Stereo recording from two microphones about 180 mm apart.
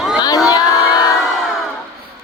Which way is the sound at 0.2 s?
20° left (ahead or behind).